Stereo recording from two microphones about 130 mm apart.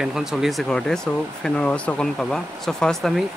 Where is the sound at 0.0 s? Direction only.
5° right (ahead or behind).